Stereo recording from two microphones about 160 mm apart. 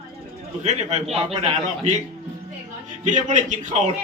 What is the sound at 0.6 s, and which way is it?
Speech, 45° right (ahead or behind).